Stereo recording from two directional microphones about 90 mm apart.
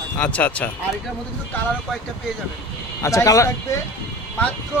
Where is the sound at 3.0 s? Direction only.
35° left (ahead or behind).